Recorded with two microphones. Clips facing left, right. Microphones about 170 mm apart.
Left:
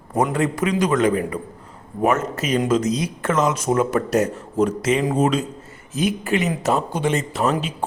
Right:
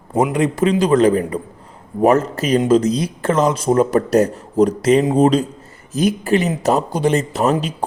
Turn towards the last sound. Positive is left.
turn(degrees=-40)  # may be behind; listen again after turning